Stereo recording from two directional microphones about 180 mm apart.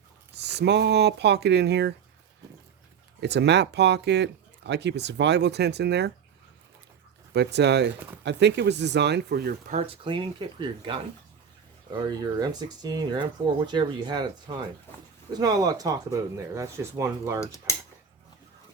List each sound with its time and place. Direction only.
0.3 s speech: 70° right (ahead or behind)
3.2 s speech: 70° right (ahead or behind)
7.3 s speech: 70° right (ahead or behind)
9.6 s speech: 35° right (ahead or behind); by 17.4 s 15° right (ahead or behind)
17.4 s speech: 15° left (ahead or behind)